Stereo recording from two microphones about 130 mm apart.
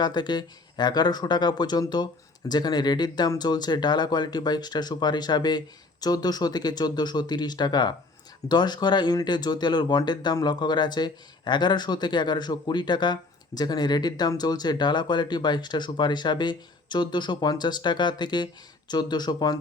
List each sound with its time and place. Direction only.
0.0 s speech: 35° left (ahead or behind)